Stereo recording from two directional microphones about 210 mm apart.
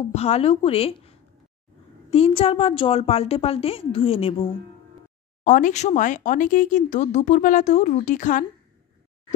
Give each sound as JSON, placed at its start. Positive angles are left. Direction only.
{"t": 0.1, "sound": "a woman's voice", "side_deg": 30}
{"t": 5.4, "sound": "speech", "side_deg": 35}